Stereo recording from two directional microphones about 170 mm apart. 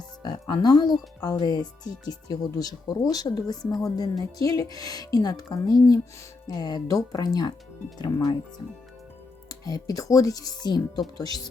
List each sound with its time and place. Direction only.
0.2 s speech: 25° left (ahead or behind)
9.6 s speech: 20° left (ahead or behind)